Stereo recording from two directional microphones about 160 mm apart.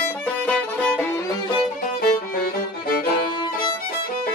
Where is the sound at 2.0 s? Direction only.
70° left (ahead or behind).